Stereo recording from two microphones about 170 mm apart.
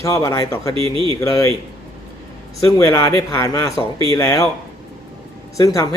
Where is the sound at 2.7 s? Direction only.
20° left (ahead or behind).